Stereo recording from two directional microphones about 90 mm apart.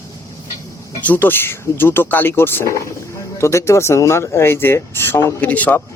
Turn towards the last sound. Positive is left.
turn(degrees=20)  # may be behind; listen again after turning